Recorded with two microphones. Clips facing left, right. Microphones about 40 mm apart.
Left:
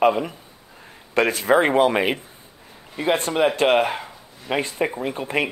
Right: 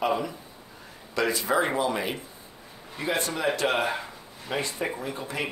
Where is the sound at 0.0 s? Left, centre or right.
Left.